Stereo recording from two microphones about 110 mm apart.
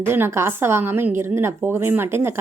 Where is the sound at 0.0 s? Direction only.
20° right (ahead or behind).